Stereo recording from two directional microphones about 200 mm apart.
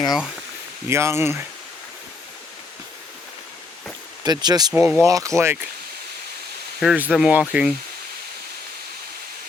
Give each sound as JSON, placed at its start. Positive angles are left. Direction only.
{"t": 0.9, "sound": "speech", "side_deg": -15}
{"t": 4.2, "sound": "speech", "side_deg": -20}
{"t": 4.7, "sound": "speech", "side_deg": -10}
{"t": 6.7, "sound": "speech", "side_deg": -5}